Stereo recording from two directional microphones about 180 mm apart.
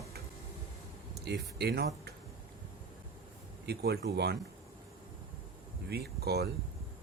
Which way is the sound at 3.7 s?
65° right (ahead or behind).